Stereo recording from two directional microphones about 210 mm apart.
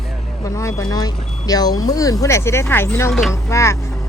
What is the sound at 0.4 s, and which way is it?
Speech, 15° left (ahead or behind).